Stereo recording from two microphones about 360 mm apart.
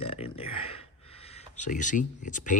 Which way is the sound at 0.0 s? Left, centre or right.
Centre.